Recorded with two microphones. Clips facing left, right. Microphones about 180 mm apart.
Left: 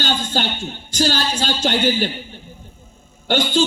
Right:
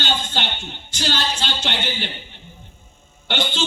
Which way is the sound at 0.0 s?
40° left (ahead or behind).